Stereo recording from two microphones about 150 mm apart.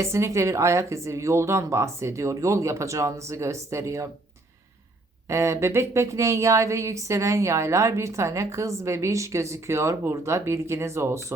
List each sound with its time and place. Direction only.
0.0 s speech: 20° right (ahead or behind)
5.3 s speech: 20° right (ahead or behind)